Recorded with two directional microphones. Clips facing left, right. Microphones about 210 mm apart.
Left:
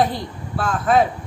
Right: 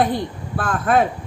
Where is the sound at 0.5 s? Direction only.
55° right (ahead or behind).